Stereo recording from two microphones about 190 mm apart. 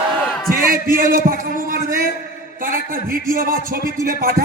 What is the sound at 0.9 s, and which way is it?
A man's voice, 50° right (ahead or behind).